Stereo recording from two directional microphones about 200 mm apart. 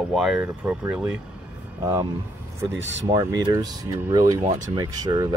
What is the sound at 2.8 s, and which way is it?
Speech, 65° right (ahead or behind).